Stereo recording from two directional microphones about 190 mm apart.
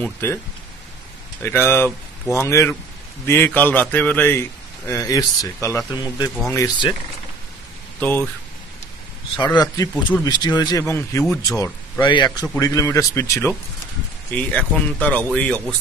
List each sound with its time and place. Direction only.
0.0 s a man's voice: 15° left (ahead or behind)
1.4 s a man's voice: 10° left (ahead or behind)
8.0 s a man's voice: 10° left (ahead or behind)
9.4 s a man's voice: 20° left (ahead or behind)